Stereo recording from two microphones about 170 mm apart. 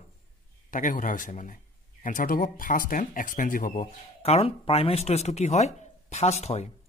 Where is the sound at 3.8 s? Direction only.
40° left (ahead or behind).